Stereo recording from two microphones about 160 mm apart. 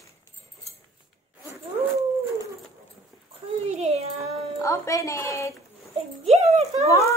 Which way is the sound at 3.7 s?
45° right (ahead or behind).